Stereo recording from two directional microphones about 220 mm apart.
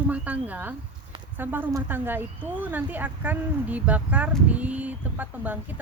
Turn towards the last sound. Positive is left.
turn(degrees=-5)  # may be behind; listen again after turning